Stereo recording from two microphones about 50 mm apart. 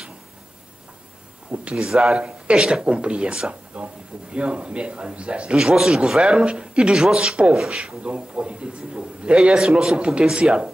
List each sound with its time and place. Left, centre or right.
1.5 s speech: right
1.8 s speech: centre
2.1 s a man's voice: right
5.6 s speech: centre
6.2 s a man's voice: centre